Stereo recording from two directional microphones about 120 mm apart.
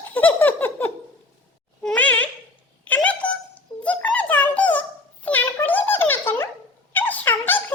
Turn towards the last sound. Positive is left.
turn(degrees=15)  # may be behind; listen again after turning